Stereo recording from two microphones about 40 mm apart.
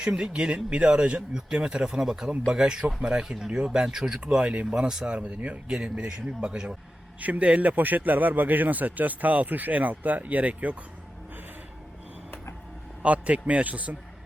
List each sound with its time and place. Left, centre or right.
0.0 s speech: right
5.1 s a man's voice: right
5.6 s speech: right
7.2 s a man's voice: right
13.0 s a man's voice: right